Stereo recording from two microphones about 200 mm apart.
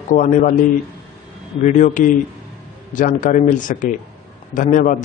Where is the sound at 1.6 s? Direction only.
40° left (ahead or behind).